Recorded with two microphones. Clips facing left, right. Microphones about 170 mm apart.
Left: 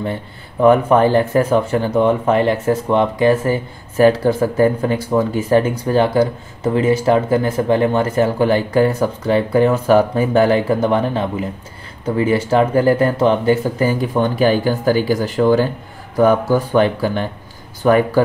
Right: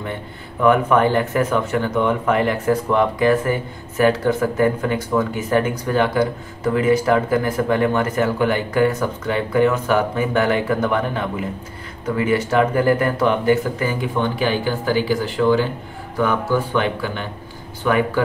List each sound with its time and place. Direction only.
0.6 s speech: 30° left (ahead or behind)